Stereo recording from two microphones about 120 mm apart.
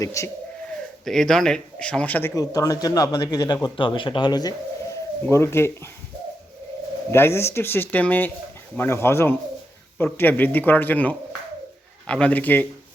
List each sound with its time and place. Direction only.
0.0 s speech: 25° left (ahead or behind)
1.0 s speech: 5° left (ahead or behind)
2.3 s speech: 30° left (ahead or behind)
5.2 s speech: 20° left (ahead or behind)
7.1 s speech: 20° left (ahead or behind)